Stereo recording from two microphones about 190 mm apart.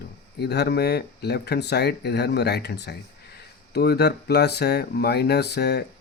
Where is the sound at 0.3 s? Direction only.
60° left (ahead or behind).